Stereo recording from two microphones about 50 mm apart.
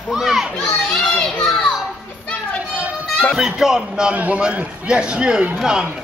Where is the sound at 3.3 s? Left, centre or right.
Centre.